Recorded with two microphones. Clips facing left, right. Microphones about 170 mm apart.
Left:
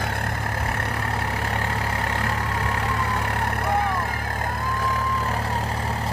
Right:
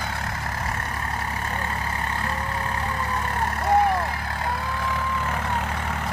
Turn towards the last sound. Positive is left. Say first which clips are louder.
# left 1 dB
turn(degrees=35)  # may be behind; listen again after turning